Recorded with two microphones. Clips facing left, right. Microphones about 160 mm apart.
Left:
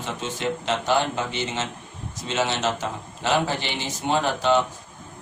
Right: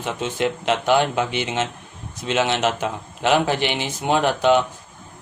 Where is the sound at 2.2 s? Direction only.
60° right (ahead or behind).